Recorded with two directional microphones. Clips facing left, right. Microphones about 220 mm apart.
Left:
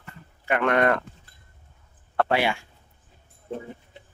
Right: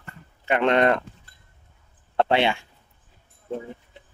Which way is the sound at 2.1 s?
25° right (ahead or behind).